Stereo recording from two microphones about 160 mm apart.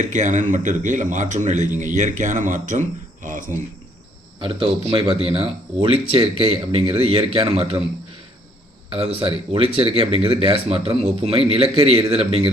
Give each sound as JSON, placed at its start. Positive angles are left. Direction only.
{"t": 0.0, "sound": "speech", "side_deg": -50}
{"t": 4.4, "sound": "speech", "side_deg": -30}
{"t": 8.9, "sound": "speech", "side_deg": -35}